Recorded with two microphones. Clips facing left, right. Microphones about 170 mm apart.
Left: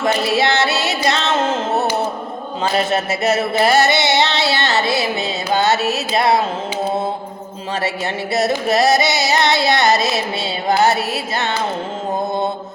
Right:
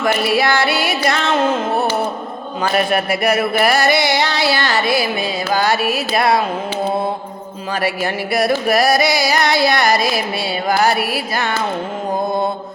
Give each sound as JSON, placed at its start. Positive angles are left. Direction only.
{"t": 0.0, "sound": "music", "side_deg": 25}
{"t": 7.8, "sound": "music", "side_deg": 25}